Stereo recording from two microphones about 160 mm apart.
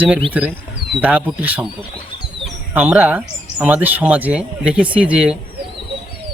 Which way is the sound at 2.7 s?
10° right (ahead or behind).